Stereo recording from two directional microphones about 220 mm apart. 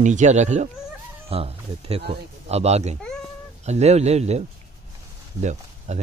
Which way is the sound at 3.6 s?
30° right (ahead or behind).